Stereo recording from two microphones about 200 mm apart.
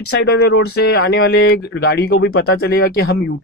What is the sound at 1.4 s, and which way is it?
Speech, 90° left.